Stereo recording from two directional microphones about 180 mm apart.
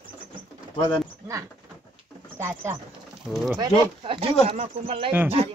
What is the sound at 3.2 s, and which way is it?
Speech, centre (ahead or behind).